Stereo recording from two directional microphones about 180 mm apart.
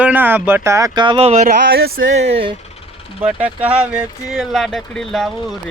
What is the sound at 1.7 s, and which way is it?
Speech, 75° right (ahead or behind).